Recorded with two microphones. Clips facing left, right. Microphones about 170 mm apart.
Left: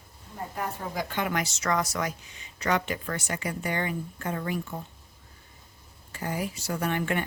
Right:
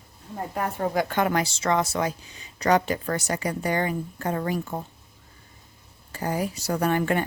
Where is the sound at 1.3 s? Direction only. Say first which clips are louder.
Right 4 dB; 30° right (ahead or behind).